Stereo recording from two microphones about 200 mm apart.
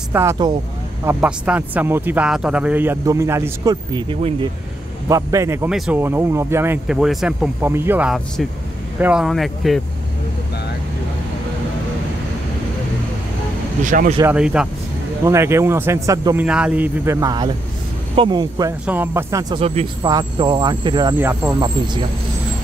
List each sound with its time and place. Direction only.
0.1 s speech: 15° right (ahead or behind)
13.8 s speech: 40° right (ahead or behind)
14.2 s speech: 5° right (ahead or behind)
19.5 s speech: 30° right (ahead or behind); by 21.5 s 10° right (ahead or behind)
21.5 s speech: 20° right (ahead or behind)